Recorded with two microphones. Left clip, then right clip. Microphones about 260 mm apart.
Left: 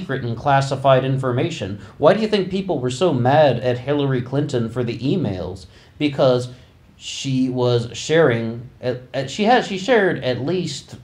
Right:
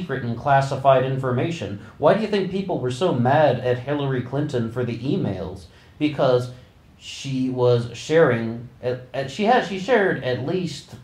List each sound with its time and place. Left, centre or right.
0.0 s speech: left